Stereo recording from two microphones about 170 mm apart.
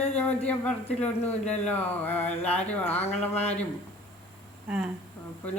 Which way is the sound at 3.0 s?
40° left (ahead or behind).